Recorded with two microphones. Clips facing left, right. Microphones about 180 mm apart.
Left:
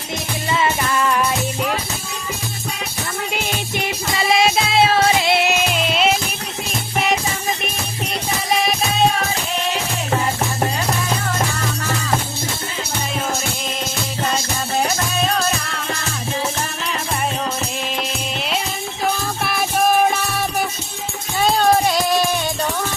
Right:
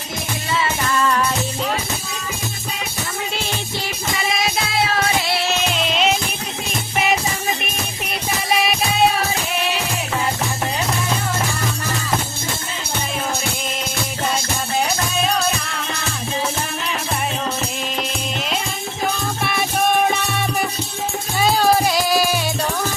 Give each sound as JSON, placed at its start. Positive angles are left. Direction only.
{"t": 3.3, "sound": "music", "side_deg": 15}
{"t": 5.7, "sound": "music", "side_deg": 5}
{"t": 19.4, "sound": "music", "side_deg": 0}
{"t": 21.4, "sound": "music", "side_deg": 0}